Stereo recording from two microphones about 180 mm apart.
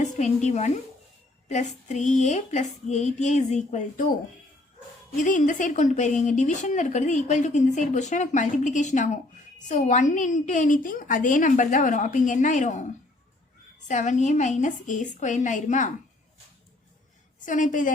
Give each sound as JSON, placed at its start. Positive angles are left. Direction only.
{"t": 0.4, "sound": "speech", "side_deg": 40}
{"t": 5.1, "sound": "speech", "side_deg": 45}
{"t": 17.4, "sound": "speech", "side_deg": 45}